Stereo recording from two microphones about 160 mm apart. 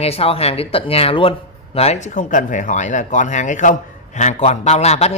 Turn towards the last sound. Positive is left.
turn(degrees=45)  # may be behind; listen again after turning